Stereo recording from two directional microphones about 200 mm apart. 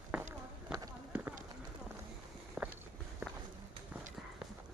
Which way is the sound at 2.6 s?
Centre (ahead or behind).